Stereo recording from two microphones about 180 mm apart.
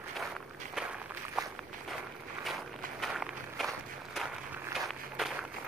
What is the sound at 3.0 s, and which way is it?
Walk, centre (ahead or behind).